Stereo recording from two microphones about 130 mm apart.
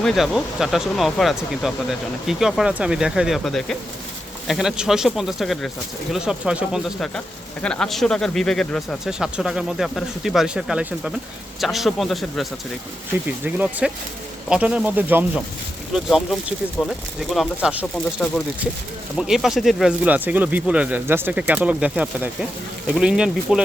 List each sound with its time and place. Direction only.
0.0 s speech: centre (ahead or behind)
7.6 s speech: 5° left (ahead or behind)
9.0 s speech: 5° right (ahead or behind)
13.2 s speech: 10° right (ahead or behind)
16.0 s speech: centre (ahead or behind)
19.1 s speech: 5° right (ahead or behind)